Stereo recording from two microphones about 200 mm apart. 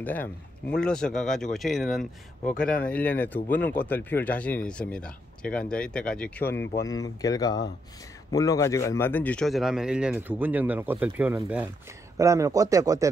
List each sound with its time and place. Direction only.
0.0 s a man's voice: 10° left (ahead or behind); by 13.1 s 15° right (ahead or behind)